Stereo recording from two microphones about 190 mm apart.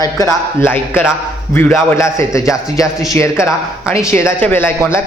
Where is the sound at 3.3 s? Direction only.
5° right (ahead or behind).